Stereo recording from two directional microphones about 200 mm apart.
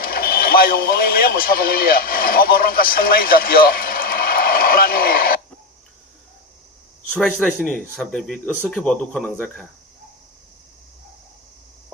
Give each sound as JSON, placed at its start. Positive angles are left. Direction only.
{"t": 0.0, "sound": "speech", "side_deg": 50}
{"t": 7.1, "sound": "speech", "side_deg": -5}